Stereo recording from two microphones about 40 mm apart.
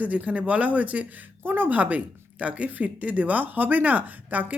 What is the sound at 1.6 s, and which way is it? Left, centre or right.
Speech, right.